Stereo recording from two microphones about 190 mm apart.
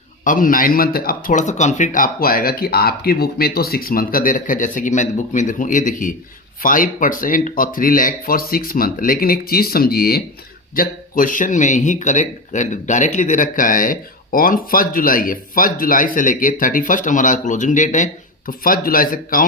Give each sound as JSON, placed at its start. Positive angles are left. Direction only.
{"t": 0.3, "sound": "speech", "side_deg": 45}